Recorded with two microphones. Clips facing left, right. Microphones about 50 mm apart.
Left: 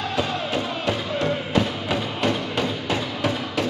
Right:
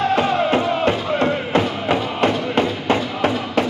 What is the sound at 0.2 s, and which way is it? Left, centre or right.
Music, right.